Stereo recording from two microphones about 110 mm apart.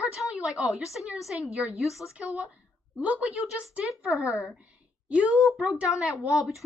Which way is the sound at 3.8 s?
Centre (ahead or behind).